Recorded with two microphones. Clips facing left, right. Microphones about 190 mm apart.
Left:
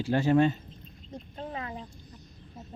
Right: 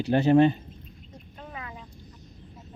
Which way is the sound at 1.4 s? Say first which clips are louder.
Left 4 dB; 30° left (ahead or behind).